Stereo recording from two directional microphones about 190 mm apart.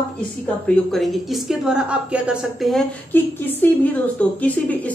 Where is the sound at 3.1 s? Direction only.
10° left (ahead or behind).